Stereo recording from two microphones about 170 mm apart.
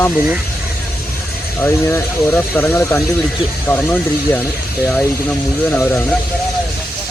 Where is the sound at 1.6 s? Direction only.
15° left (ahead or behind).